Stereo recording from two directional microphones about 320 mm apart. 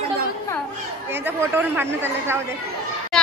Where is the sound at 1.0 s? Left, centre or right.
Centre.